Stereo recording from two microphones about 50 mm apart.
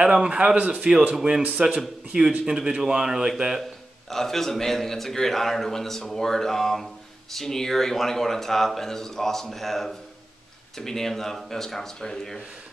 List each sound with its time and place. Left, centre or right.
0.0 s speech: centre
4.1 s a man's voice: centre